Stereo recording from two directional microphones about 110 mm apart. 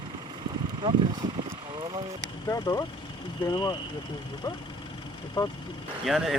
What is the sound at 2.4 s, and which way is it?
Speech, 30° left (ahead or behind).